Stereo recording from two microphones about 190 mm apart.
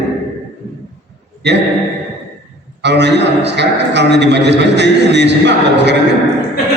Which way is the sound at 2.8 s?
65° right (ahead or behind).